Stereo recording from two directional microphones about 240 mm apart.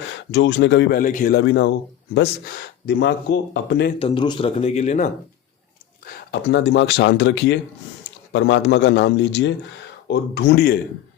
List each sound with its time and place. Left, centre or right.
0.3 s speech: left
2.8 s speech: left
3.9 s speech: left
6.3 s speech: left